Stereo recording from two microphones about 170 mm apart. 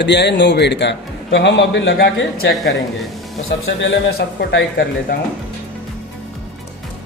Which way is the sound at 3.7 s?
90° left.